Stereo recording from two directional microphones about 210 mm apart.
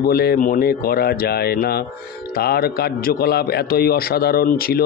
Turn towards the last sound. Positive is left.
turn(degrees=45)  # may be behind; listen again after turning